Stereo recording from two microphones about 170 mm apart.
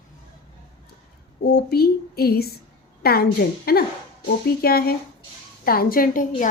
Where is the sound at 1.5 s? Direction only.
65° left (ahead or behind).